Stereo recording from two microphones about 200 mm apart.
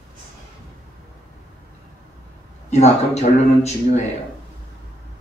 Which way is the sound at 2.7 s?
35° left (ahead or behind).